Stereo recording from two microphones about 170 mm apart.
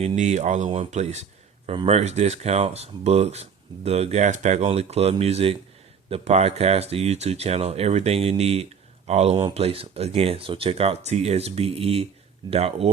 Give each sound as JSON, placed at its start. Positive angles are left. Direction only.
{"t": 0.0, "sound": "speech", "side_deg": -45}